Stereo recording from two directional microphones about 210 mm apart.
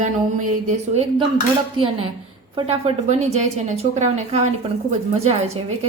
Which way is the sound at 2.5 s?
30° right (ahead or behind).